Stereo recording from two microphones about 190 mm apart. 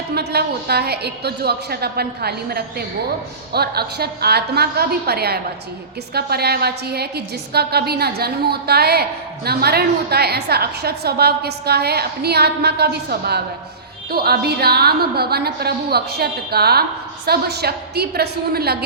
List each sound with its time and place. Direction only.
0.1 s a woman's voice: 55° right (ahead or behind)